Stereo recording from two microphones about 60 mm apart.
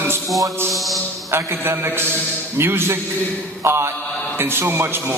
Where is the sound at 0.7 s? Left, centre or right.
Centre.